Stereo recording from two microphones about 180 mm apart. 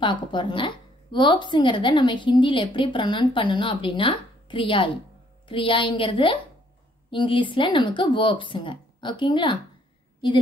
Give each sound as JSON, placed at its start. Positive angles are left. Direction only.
{"t": 0.0, "sound": "a woman's voice", "side_deg": 25}